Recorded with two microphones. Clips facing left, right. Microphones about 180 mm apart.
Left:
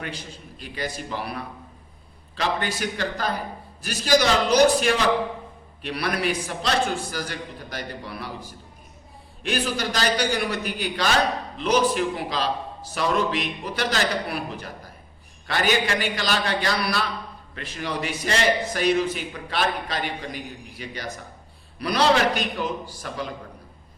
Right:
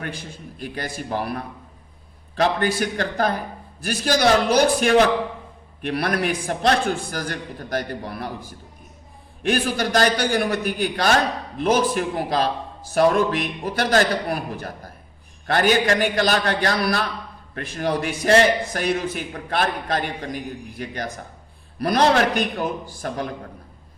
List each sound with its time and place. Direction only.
0.0 s a man's voice: 50° right (ahead or behind)
9.4 s a man's voice: 55° right (ahead or behind)